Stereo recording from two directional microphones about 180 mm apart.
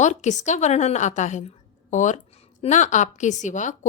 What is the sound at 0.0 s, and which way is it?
A woman's voice, 40° left (ahead or behind).